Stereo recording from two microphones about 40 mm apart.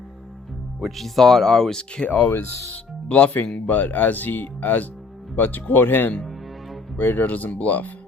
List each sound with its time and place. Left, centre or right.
0.9 s speech: centre
3.1 s speech: left